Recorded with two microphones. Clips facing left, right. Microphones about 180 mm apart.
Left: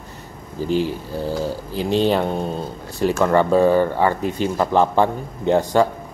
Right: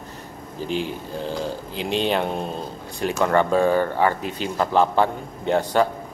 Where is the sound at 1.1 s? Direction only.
10° left (ahead or behind).